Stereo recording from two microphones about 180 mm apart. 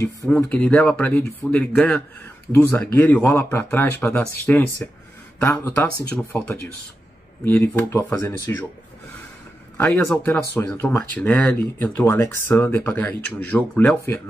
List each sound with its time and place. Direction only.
0.3 s speech: 10° left (ahead or behind)
9.8 s speech: 10° left (ahead or behind)